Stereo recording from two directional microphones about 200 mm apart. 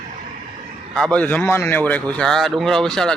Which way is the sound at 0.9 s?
5° left (ahead or behind).